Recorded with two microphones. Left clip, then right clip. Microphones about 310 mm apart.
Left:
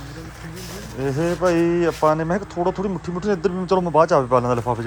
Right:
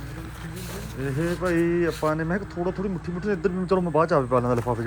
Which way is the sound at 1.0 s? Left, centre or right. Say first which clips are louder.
Left 7 dB; centre.